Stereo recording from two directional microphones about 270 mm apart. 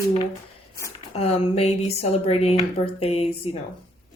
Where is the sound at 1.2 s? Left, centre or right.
Left.